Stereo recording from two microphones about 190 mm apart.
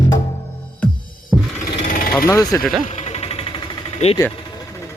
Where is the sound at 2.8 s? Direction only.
35° left (ahead or behind).